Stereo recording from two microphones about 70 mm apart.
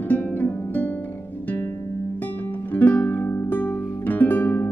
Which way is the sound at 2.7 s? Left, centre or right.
Left.